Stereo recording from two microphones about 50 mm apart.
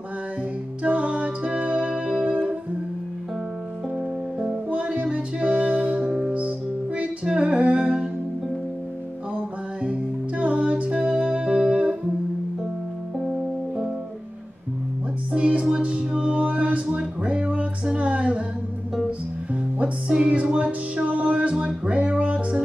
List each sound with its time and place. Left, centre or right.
0.8 s music: right
4.6 s music: right
7.2 s humming: right
9.8 s music: right
15.3 s music: right
19.8 s music: centre